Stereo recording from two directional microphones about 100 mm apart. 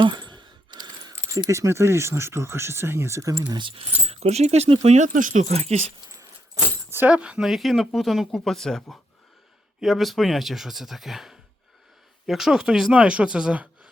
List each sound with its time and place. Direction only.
0.0 s a sound: 50° right (ahead or behind)
1.5 s speech: 30° right (ahead or behind)
4.0 s speech: 90° right
6.9 s speech: 15° right (ahead or behind)